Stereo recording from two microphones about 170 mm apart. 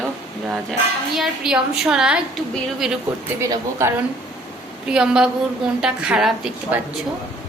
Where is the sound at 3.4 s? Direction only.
15° right (ahead or behind).